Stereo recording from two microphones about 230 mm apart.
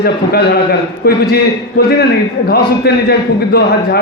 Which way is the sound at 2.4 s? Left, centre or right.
Left.